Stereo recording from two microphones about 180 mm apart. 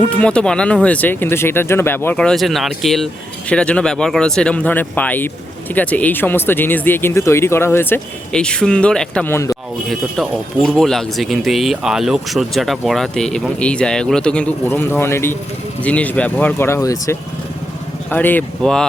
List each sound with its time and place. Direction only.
0.0 s speech: 5° left (ahead or behind)
9.9 s speech: centre (ahead or behind)